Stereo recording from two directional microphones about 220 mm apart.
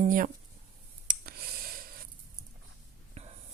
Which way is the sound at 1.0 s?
40° right (ahead or behind).